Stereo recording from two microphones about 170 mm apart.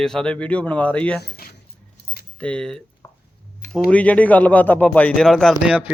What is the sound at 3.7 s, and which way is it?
Speech, 10° left (ahead or behind).